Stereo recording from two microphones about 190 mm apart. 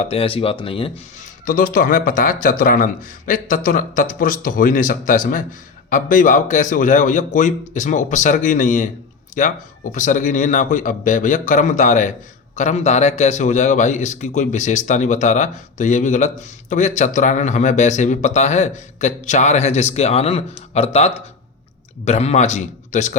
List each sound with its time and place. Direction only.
0.0 s speech: 30° left (ahead or behind)
1.2 s speech: 45° left (ahead or behind)